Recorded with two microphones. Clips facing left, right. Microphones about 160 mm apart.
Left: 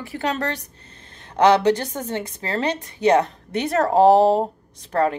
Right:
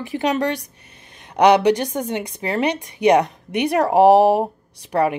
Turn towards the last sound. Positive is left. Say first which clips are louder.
# right 1 dB
turn(degrees=-15)  # may be behind; listen again after turning